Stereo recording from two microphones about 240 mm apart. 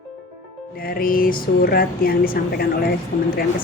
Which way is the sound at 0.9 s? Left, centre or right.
Left.